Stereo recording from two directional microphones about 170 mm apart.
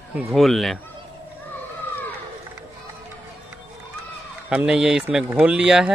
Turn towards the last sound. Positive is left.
turn(degrees=-5)  # may be behind; listen again after turning